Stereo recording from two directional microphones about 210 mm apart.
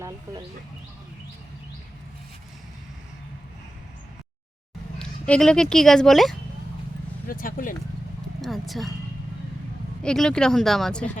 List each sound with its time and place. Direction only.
4.9 s speech: 5° left (ahead or behind)
7.3 s speech: 40° left (ahead or behind)
8.4 s speech: centre (ahead or behind)
10.0 s speech: 5° left (ahead or behind)